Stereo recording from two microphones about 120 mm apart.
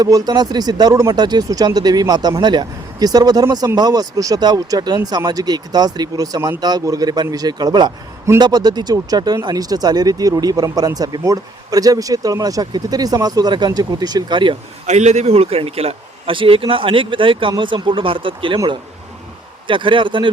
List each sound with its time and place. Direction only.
0.0 s speech: 35° right (ahead or behind)
14.8 s a man's voice: 70° right (ahead or behind); by 18.6 s 45° right (ahead or behind)
19.6 s a man's voice: 45° right (ahead or behind)